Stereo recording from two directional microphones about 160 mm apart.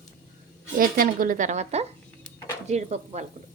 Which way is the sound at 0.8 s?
60° right (ahead or behind).